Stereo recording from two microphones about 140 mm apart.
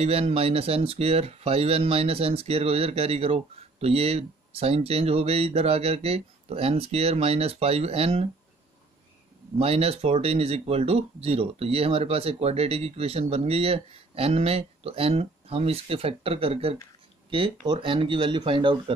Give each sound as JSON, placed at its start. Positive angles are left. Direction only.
{"t": 0.0, "sound": "speech", "side_deg": -45}
{"t": 9.6, "sound": "speech", "side_deg": -45}